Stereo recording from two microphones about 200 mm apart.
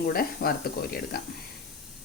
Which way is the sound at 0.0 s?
45° left (ahead or behind).